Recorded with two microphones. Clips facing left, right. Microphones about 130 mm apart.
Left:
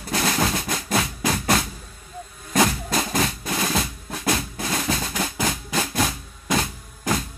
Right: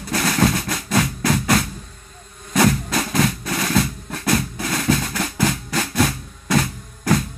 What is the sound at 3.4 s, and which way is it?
Drum, 15° left (ahead or behind).